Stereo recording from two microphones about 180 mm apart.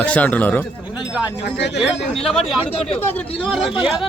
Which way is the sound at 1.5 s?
75° left (ahead or behind).